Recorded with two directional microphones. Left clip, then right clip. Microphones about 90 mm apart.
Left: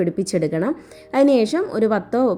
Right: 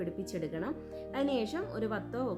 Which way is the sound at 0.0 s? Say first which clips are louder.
Left 17 dB; 30° left (ahead or behind).